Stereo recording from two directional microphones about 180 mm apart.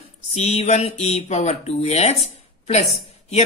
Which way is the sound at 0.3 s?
35° left (ahead or behind).